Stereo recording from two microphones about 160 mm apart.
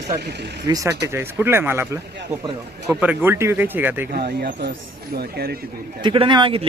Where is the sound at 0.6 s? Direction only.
20° right (ahead or behind).